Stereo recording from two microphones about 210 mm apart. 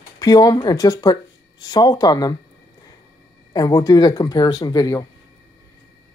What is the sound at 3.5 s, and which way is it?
Speech, 15° left (ahead or behind).